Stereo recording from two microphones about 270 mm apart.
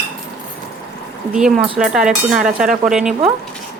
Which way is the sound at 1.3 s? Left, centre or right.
Centre.